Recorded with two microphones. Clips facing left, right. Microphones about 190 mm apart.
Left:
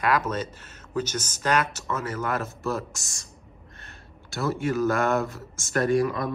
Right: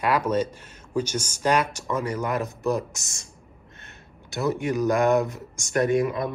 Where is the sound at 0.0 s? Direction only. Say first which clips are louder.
Right 3 dB; 10° right (ahead or behind).